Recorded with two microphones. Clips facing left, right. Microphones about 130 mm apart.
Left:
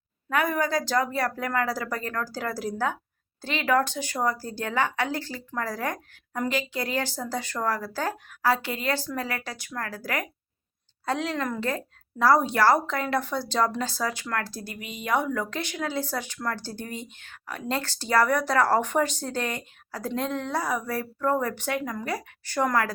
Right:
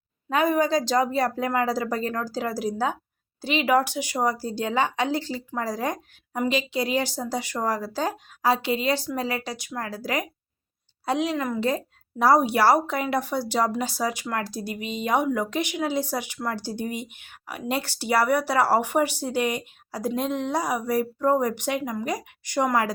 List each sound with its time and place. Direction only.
0.3 s a woman's voice: 20° right (ahead or behind)